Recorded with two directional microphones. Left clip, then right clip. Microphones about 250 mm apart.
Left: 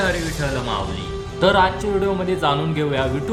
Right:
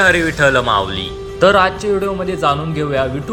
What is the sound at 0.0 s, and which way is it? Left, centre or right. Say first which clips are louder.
Speech: right 10 dB; right.